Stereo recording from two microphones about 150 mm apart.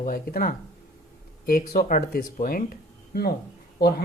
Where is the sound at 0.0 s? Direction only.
70° left (ahead or behind).